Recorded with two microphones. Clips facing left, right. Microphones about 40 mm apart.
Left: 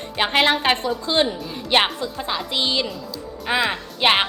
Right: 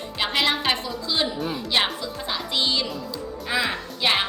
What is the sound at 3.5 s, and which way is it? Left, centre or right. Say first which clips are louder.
Speech: left 4 dB; left.